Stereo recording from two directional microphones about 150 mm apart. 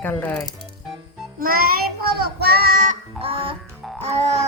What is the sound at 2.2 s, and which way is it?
Child singing, 90° right.